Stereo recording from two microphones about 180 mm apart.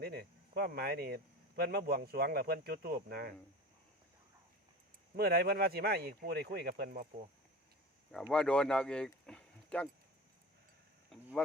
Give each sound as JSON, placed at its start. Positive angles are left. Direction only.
{"t": 0.0, "sound": "speech", "side_deg": -60}
{"t": 5.1, "sound": "speech", "side_deg": -60}
{"t": 8.1, "sound": "speech", "side_deg": 5}
{"t": 11.1, "sound": "a sound", "side_deg": 0}